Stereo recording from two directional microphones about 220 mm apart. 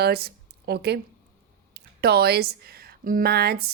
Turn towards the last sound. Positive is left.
turn(degrees=-45)  # may be behind; listen again after turning